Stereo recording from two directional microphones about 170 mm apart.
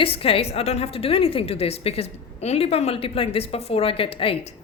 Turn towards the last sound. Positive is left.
turn(degrees=35)  # may be behind; listen again after turning